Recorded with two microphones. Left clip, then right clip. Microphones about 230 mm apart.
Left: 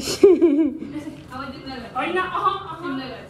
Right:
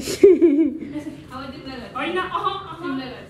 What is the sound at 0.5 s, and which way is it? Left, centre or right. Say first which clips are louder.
Laughter: right 1 dB; centre.